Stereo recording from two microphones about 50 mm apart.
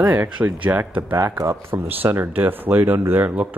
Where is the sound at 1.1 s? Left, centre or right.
Right.